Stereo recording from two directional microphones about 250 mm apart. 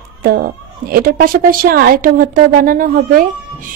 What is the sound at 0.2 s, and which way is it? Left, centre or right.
A woman's voice, right.